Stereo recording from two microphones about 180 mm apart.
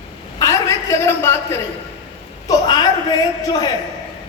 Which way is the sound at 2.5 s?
20° left (ahead or behind).